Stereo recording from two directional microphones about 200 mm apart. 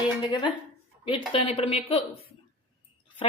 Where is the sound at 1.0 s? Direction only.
25° left (ahead or behind).